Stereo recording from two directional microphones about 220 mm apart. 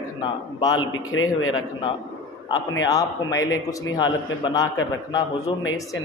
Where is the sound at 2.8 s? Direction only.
15° left (ahead or behind).